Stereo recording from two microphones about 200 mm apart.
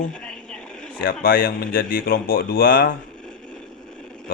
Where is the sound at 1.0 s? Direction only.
50° left (ahead or behind).